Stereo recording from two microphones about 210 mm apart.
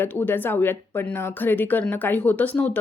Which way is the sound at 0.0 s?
10° left (ahead or behind).